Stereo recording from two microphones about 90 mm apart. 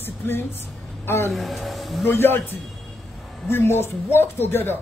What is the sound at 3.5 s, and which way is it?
Speech, 25° left (ahead or behind).